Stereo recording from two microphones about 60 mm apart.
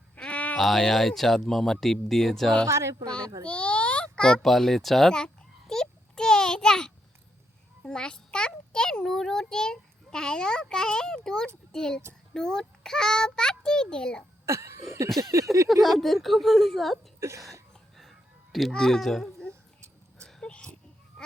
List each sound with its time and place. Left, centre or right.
0.3 s bleat: left
0.5 s a woman's voice: centre
2.6 s speech: right
3.4 s a child's voice: centre
14.4 s cough: right
15.3 s speech: right
15.7 s a woman's voice: centre
17.2 s speech: right
18.7 s a child's voice: centre
20.2 s a sound: centre